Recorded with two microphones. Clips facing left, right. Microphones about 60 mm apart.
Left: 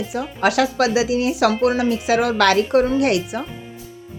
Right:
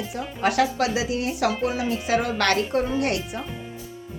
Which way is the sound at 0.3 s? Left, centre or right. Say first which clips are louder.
Left 4 dB; left.